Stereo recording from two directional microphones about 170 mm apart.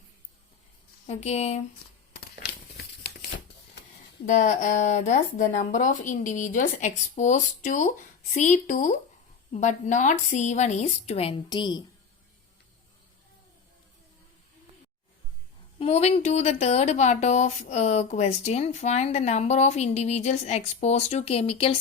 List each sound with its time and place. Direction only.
1.0 s speech: 40° left (ahead or behind)
2.7 s tearing: 75° left (ahead or behind)
4.3 s speech: 50° left (ahead or behind); by 11.8 s 25° left (ahead or behind)
15.8 s speech: 40° left (ahead or behind)